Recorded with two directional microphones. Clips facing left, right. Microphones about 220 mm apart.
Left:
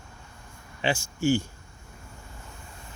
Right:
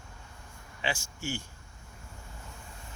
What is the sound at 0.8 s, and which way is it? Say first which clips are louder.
Speech: left 10 dB; 30° left (ahead or behind).